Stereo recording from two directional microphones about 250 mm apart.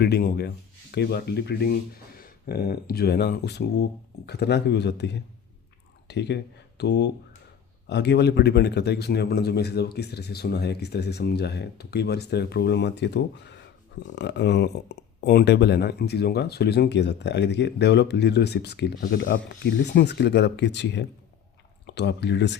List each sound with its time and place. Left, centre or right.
0.0 s a man's voice: left